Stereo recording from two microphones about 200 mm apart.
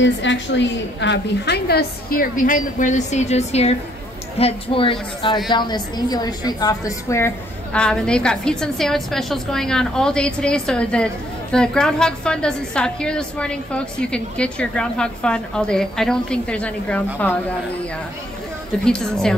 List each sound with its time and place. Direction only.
0.0 s a woman's voice: 65° left (ahead or behind); by 17.4 s 5° left (ahead or behind)
18.9 s a woman's voice: 5° left (ahead or behind)